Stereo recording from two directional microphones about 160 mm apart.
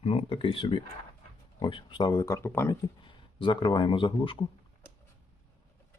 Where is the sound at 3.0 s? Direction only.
30° left (ahead or behind).